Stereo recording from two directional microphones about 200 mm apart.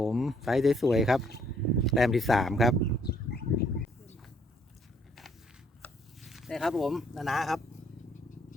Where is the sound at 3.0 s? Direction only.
50° left (ahead or behind).